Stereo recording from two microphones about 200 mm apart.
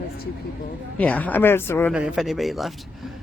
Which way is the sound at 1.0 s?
10° left (ahead or behind).